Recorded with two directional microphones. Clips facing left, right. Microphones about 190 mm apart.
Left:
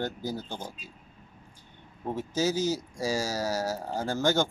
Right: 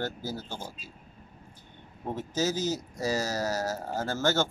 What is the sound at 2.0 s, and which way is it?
Speech, 10° left (ahead or behind).